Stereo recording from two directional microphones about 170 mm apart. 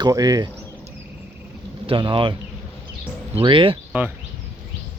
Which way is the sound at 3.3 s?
30° right (ahead or behind).